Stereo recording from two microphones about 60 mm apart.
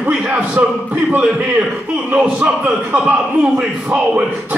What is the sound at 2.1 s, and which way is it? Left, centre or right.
A man's voice, right.